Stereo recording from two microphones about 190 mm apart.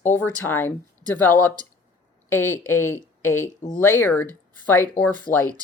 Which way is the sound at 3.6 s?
45° left (ahead or behind).